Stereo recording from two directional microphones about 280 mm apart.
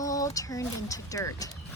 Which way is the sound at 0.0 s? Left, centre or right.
Centre.